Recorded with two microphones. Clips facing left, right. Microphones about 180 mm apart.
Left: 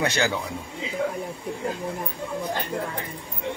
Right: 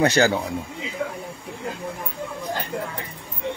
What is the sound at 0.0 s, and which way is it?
Speech, 40° right (ahead or behind).